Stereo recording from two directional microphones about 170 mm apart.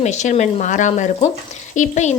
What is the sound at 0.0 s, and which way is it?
Speech, 45° left (ahead or behind).